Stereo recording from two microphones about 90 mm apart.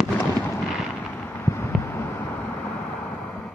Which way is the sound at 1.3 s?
30° left (ahead or behind).